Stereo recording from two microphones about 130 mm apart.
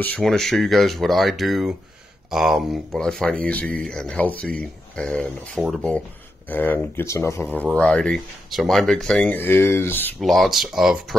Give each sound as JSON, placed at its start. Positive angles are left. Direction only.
{"t": 0.0, "sound": "speech", "side_deg": 5}
{"t": 7.4, "sound": "speech", "side_deg": -5}
{"t": 7.7, "sound": "speech", "side_deg": 10}
{"t": 10.2, "sound": "speech", "side_deg": 0}